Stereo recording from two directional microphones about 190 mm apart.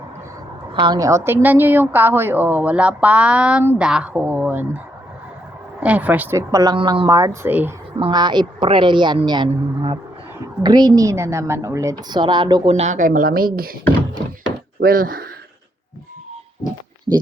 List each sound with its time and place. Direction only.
0.7 s a woman's voice: 25° right (ahead or behind)
5.8 s a woman's voice: 5° right (ahead or behind)
7.9 s a woman's voice: 25° right (ahead or behind)
10.6 s a woman's voice: 20° right (ahead or behind)
12.7 s speech: 40° right (ahead or behind)
14.8 s speech: 50° right (ahead or behind)